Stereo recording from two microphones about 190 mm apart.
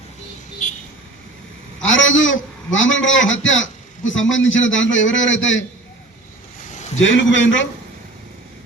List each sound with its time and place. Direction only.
1.8 s a man's voice: 90° left
6.7 s a sound: 40° left (ahead or behind)
7.0 s a man's voice: 80° left